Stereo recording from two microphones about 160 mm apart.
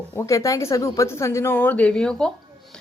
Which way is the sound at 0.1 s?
20° left (ahead or behind).